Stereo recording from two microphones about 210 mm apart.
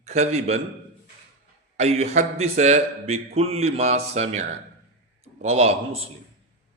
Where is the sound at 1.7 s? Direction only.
30° right (ahead or behind).